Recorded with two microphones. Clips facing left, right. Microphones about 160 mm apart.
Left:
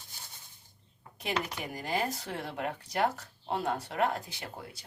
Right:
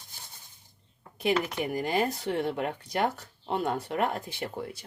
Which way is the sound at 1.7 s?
60° right (ahead or behind).